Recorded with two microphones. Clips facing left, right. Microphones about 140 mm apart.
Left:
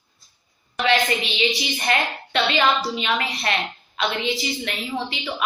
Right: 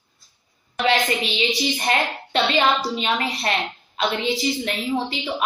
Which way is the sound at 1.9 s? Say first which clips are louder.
Left 3 dB; 40° right (ahead or behind).